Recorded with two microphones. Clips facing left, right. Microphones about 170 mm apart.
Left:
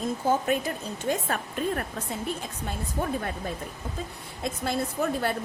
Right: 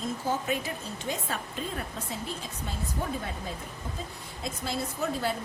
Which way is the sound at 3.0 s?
50° left (ahead or behind).